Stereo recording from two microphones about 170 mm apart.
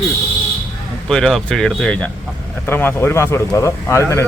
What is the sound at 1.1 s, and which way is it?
Speech, 5° left (ahead or behind).